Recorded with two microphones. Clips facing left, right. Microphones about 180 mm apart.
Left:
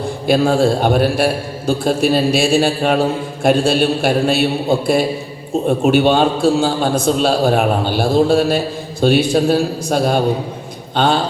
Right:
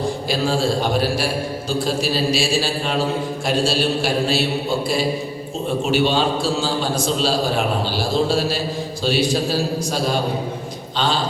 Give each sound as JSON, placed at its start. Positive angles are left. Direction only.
{"t": 0.3, "sound": "a man's voice", "side_deg": 55}
{"t": 5.6, "sound": "a man's voice", "side_deg": 55}